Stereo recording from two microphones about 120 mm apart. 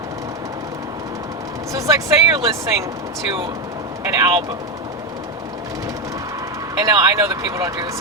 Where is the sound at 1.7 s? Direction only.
30° right (ahead or behind).